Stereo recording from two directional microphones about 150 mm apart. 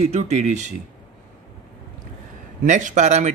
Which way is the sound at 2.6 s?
55° right (ahead or behind).